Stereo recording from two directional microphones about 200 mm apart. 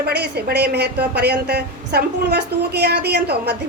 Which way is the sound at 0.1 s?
55° right (ahead or behind).